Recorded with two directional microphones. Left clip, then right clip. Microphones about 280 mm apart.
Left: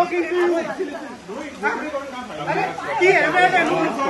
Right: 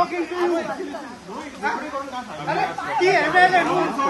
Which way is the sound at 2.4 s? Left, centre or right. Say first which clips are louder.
Left 1 dB; right.